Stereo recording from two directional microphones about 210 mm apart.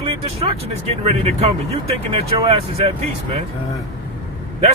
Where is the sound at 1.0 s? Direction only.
30° right (ahead or behind).